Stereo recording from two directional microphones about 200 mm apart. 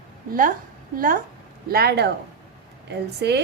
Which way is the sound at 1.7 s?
50° right (ahead or behind).